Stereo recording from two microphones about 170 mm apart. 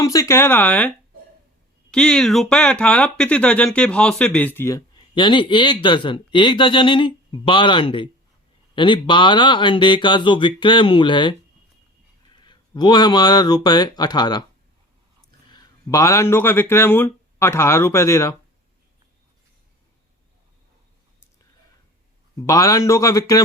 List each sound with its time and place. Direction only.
0.0 s speech: 20° left (ahead or behind)
1.9 s speech: 5° left (ahead or behind); by 11.3 s 30° left (ahead or behind)
12.4 s speech: 25° left (ahead or behind)
15.5 s speech: 20° left (ahead or behind)
22.4 s speech: 20° left (ahead or behind)